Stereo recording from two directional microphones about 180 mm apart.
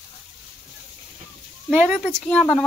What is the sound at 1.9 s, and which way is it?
Speech, centre (ahead or behind).